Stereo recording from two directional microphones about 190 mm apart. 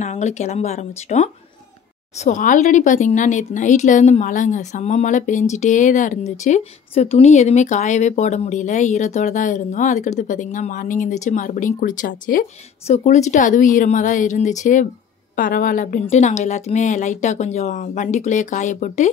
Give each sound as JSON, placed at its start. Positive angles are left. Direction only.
{"t": 0.0, "sound": "speech", "side_deg": 35}